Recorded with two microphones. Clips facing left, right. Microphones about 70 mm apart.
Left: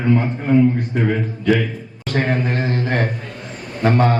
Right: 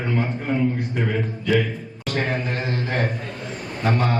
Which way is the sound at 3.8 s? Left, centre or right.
Left.